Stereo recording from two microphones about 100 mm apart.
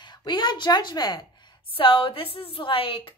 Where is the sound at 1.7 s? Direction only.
60° left (ahead or behind).